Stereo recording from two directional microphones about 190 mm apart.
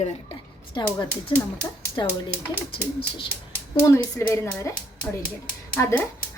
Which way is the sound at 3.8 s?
15° left (ahead or behind).